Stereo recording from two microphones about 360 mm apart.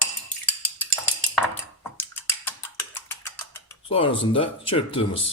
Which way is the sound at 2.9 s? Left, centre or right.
Centre.